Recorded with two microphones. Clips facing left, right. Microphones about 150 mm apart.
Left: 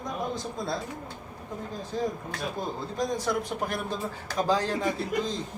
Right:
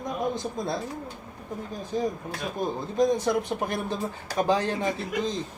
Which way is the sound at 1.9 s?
15° right (ahead or behind).